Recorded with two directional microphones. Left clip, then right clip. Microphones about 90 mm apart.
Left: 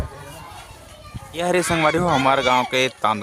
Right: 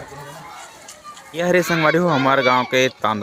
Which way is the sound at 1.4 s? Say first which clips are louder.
Right 2 dB; 20° left (ahead or behind).